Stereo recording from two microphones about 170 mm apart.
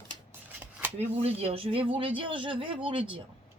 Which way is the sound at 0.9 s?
35° right (ahead or behind).